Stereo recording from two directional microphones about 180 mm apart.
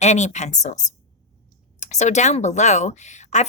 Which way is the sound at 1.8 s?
40° left (ahead or behind).